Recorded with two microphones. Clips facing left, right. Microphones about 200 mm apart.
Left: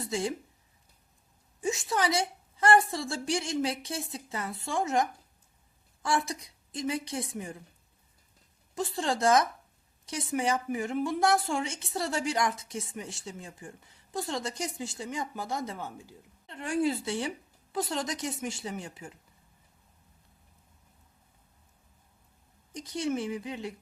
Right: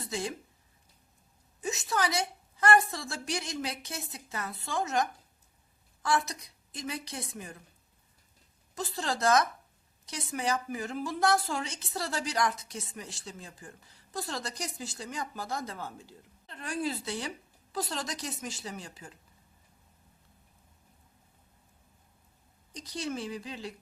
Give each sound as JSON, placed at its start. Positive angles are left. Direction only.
{"t": 0.0, "sound": "speech", "side_deg": 25}
{"t": 1.6, "sound": "a woman's voice", "side_deg": 30}
{"t": 8.7, "sound": "a woman's voice", "side_deg": 25}
{"t": 22.7, "sound": "a woman's voice", "side_deg": 25}